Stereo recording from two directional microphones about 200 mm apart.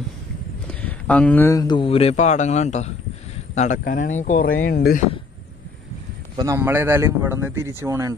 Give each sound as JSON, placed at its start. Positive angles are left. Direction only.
{"t": 0.7, "sound": "speech", "side_deg": 5}
{"t": 6.3, "sound": "a man's voice", "side_deg": -15}